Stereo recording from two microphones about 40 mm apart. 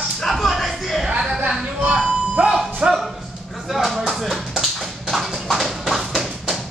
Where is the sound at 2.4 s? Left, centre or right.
Right.